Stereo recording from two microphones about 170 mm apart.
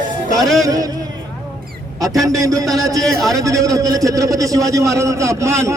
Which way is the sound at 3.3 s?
20° right (ahead or behind).